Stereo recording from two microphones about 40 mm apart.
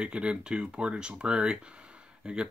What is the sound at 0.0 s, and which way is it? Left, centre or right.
Speech, right.